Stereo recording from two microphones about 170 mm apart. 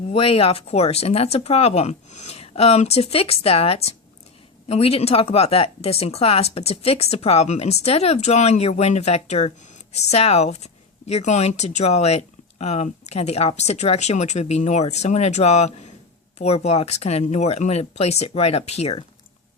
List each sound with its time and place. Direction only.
0.1 s speech: 35° left (ahead or behind)